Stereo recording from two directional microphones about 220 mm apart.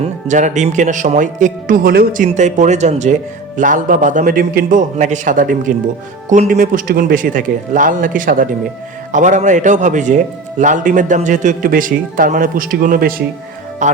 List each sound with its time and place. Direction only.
0.0 s speech: 35° right (ahead or behind)